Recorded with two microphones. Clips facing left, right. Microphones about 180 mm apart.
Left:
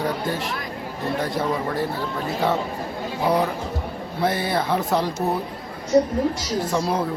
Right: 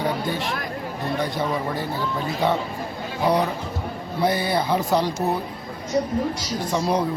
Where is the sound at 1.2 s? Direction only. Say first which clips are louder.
Left 1 dB; centre (ahead or behind).